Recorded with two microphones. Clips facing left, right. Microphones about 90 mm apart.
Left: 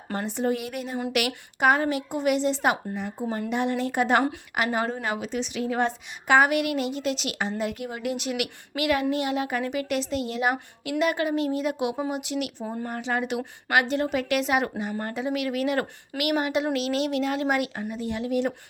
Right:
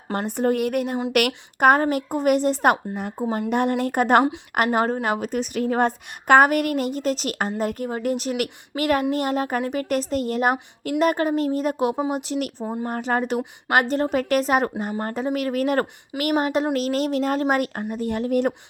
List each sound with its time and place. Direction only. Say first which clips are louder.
0.1 s a woman's voice: right 4 dB; 50° right (ahead or behind)